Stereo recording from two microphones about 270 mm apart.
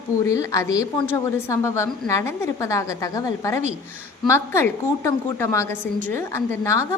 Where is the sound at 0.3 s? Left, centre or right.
Centre.